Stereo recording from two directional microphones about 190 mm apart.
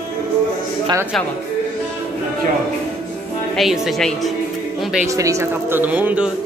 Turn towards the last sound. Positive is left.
turn(degrees=-10)  # may be behind; listen again after turning